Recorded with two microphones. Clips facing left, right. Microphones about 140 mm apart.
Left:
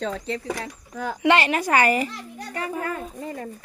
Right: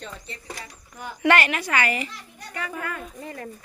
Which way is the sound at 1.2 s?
20° left (ahead or behind).